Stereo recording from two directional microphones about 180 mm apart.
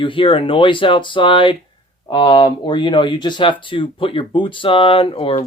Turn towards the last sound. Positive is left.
turn(degrees=30)  # may be behind; listen again after turning